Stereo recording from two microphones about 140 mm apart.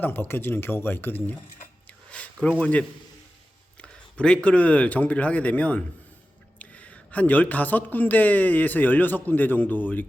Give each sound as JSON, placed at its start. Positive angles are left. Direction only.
{"t": 0.0, "sound": "speech", "side_deg": 15}
{"t": 2.0, "sound": "a sound", "side_deg": 10}
{"t": 3.8, "sound": "speech", "side_deg": 5}